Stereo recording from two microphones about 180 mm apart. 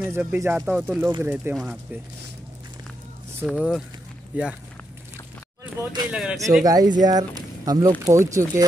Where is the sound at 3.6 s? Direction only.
5° right (ahead or behind).